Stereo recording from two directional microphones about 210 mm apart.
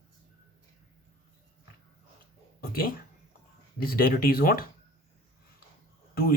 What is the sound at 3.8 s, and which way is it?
Speech, 45° left (ahead or behind).